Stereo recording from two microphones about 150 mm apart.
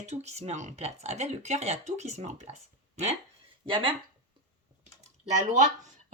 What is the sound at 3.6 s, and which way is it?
Speech, 35° right (ahead or behind).